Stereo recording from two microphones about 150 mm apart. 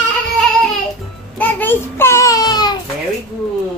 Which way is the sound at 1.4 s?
10° left (ahead or behind).